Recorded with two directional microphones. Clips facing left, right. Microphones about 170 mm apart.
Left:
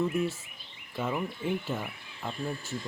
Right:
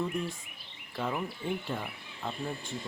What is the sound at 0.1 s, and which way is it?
Speech, 5° left (ahead or behind).